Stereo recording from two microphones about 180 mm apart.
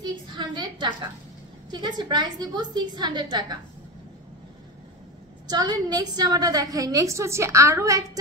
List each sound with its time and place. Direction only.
0.0 s a woman's voice: 25° right (ahead or behind)
5.5 s a woman's voice: 20° right (ahead or behind)